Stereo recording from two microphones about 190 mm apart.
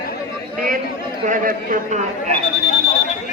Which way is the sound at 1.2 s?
45° right (ahead or behind).